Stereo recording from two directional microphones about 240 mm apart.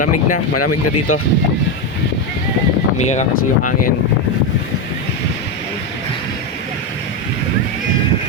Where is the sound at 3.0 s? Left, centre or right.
Left.